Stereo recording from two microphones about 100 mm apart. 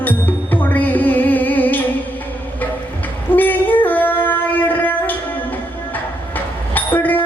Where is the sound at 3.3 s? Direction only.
20° left (ahead or behind).